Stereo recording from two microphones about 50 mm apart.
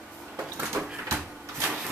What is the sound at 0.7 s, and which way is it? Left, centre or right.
Cupboard open or close, right.